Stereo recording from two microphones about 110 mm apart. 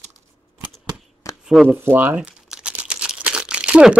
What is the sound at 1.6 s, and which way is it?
Crumpling, 20° right (ahead or behind).